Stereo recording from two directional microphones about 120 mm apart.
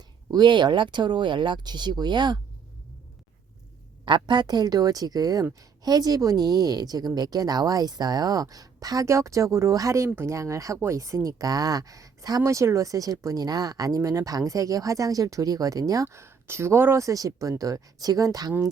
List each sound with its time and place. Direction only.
0.3 s a woman's voice: 40° right (ahead or behind)
4.0 s a woman's voice: 40° right (ahead or behind)